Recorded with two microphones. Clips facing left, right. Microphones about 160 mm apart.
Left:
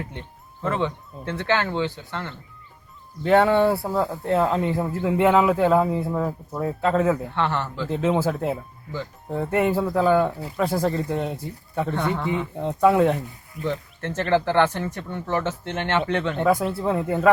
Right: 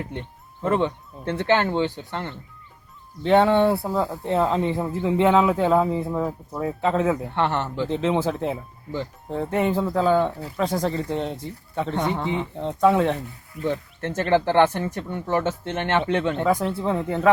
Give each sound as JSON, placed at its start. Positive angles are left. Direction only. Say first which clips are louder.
{"t": 0.6, "sound": "speech", "louder": "right 3 dB", "side_deg": -15}
{"t": 3.2, "sound": "speech", "louder": "even", "side_deg": 0}
{"t": 7.3, "sound": "speech", "louder": "right 2 dB", "side_deg": -20}
{"t": 7.9, "sound": "speech", "louder": "left 2 dB", "side_deg": 5}
{"t": 11.9, "sound": "speech", "louder": "right 1 dB", "side_deg": -15}
{"t": 12.5, "sound": "speech", "louder": "left 1 dB", "side_deg": 10}
{"t": 13.7, "sound": "speech", "louder": "right 2 dB", "side_deg": -15}
{"t": 16.5, "sound": "speech", "louder": "left 4 dB", "side_deg": 10}